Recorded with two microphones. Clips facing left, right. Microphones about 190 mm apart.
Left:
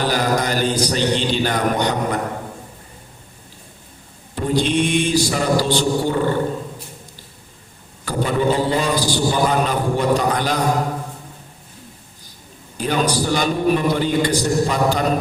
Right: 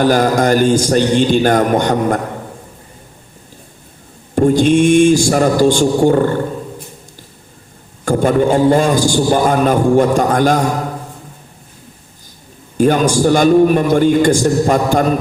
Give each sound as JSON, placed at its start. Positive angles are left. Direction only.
{"t": 0.0, "sound": "a man's voice", "side_deg": -50}
{"t": 4.4, "sound": "a man's voice", "side_deg": -45}
{"t": 8.0, "sound": "a man's voice", "side_deg": -50}
{"t": 12.7, "sound": "a man's voice", "side_deg": -50}